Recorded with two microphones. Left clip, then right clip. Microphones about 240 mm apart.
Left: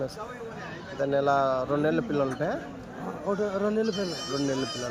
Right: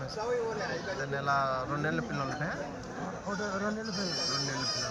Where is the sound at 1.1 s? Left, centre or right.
Left.